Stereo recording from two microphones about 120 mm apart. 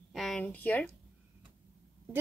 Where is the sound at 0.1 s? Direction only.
Centre (ahead or behind).